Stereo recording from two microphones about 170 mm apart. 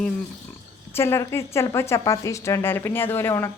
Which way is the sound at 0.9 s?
15° left (ahead or behind).